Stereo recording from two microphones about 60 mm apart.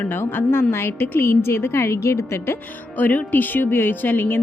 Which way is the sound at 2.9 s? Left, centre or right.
Left.